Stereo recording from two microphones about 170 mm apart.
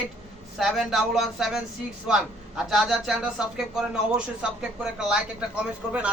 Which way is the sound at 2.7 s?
5° right (ahead or behind).